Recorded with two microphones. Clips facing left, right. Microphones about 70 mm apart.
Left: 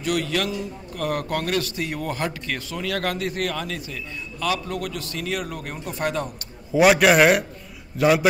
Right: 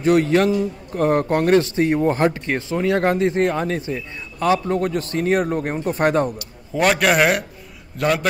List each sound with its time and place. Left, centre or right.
0.0 s a man's voice: right
6.7 s a man's voice: centre